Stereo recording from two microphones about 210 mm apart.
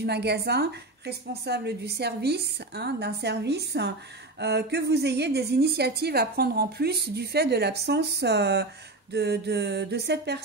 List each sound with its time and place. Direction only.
0.0 s a woman's voice: 50° right (ahead or behind)